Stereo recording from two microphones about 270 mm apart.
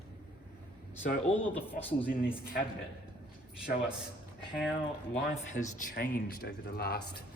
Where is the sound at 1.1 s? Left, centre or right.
Left.